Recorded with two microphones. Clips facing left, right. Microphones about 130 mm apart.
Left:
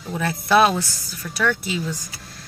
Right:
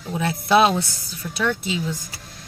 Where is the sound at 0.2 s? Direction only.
20° right (ahead or behind).